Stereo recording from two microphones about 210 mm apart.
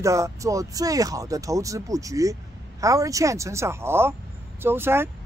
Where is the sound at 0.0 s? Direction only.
15° right (ahead or behind).